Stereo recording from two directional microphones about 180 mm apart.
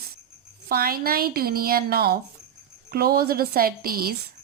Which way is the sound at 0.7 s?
55° right (ahead or behind).